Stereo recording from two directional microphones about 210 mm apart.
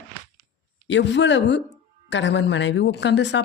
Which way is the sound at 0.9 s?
60° left (ahead or behind).